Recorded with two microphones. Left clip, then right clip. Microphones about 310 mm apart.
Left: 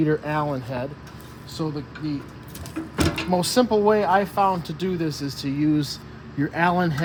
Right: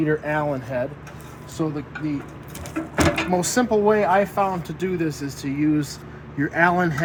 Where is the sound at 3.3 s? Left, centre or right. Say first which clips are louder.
Even; centre.